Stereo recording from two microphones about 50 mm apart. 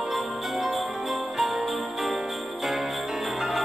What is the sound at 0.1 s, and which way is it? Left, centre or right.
Jingle bell, centre.